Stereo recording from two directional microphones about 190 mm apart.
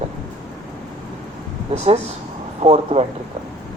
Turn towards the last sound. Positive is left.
turn(degrees=-30)  # may be behind; listen again after turning